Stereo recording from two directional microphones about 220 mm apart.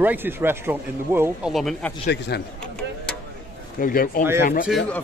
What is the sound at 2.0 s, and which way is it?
Speech, 50° left (ahead or behind).